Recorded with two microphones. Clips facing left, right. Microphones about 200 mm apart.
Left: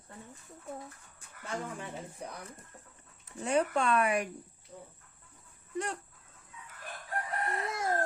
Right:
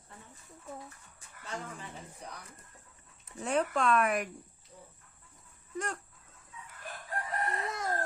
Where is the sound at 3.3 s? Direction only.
Centre (ahead or behind).